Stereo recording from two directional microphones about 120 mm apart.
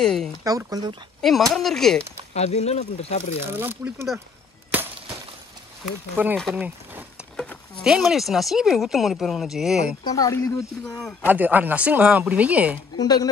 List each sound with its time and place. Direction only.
0.0 s speech: 5° left (ahead or behind)
0.4 s speech: 30° right (ahead or behind)
1.5 s speech: 5° left (ahead or behind)
2.3 s speech: 65° left (ahead or behind)
3.4 s speech: 15° right (ahead or behind)
6.2 s speech: 15° right (ahead or behind)
6.5 s a sound: 15° right (ahead or behind)
7.8 s speech: 5° right (ahead or behind)
10.0 s speech: 30° left (ahead or behind)
10.9 s speech: centre (ahead or behind)
11.2 s speech: 15° right (ahead or behind)
12.9 s speech: 35° left (ahead or behind)